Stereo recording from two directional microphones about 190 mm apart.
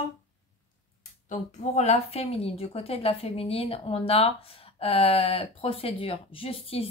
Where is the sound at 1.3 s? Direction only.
35° left (ahead or behind).